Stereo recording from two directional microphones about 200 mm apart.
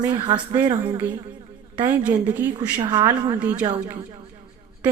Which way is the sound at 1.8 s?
10° right (ahead or behind).